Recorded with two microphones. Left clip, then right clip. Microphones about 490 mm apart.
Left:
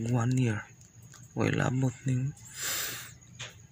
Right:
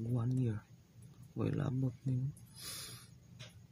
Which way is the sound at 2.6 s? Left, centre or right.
Right.